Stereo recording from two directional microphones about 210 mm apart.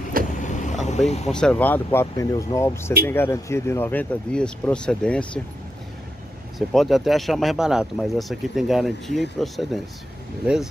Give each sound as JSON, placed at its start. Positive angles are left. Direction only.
{"t": 0.4, "sound": "vehicle", "side_deg": 35}
{"t": 1.3, "sound": "speech", "side_deg": 5}
{"t": 6.7, "sound": "speech", "side_deg": 0}